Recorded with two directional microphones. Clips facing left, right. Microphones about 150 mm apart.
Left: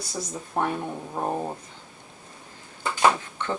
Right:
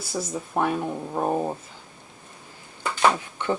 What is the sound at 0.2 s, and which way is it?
Speech, 5° right (ahead or behind).